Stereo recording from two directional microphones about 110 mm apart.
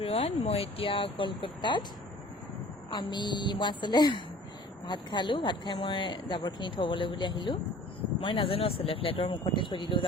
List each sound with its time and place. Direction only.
0.0 s speech: 65° left (ahead or behind); by 1.8 s 45° left (ahead or behind)
2.9 s speech: 45° left (ahead or behind)